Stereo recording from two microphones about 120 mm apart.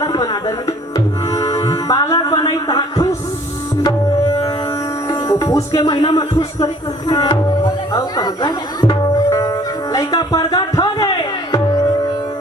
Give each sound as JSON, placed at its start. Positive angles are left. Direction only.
{"t": 0.0, "sound": "music", "side_deg": 30}
{"t": 5.0, "sound": "music", "side_deg": 25}
{"t": 5.8, "sound": "speech", "side_deg": 50}
{"t": 7.1, "sound": "music", "side_deg": 30}